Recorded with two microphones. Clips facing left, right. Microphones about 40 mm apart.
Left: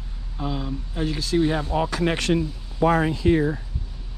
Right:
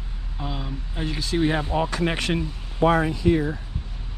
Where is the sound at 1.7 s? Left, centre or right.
Centre.